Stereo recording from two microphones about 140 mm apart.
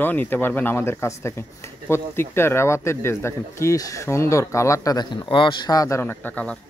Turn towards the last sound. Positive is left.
turn(degrees=10)  # may be behind; listen again after turning